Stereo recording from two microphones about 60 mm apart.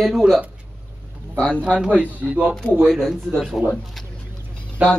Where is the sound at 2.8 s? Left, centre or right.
Centre.